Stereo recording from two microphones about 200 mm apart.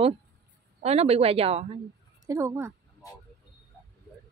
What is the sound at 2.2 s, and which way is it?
Speech, 15° right (ahead or behind).